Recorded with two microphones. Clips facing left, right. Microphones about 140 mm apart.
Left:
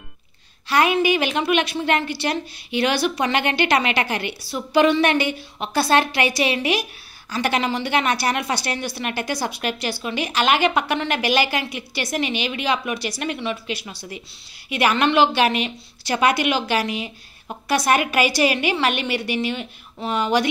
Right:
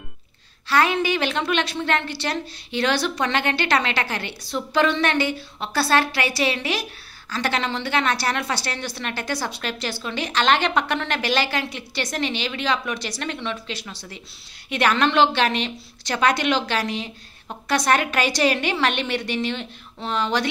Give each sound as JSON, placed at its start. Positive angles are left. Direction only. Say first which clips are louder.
{"t": 0.7, "sound": "a woman's voice", "louder": "left 2 dB", "side_deg": 15}